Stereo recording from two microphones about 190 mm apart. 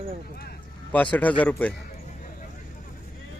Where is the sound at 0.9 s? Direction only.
5° left (ahead or behind).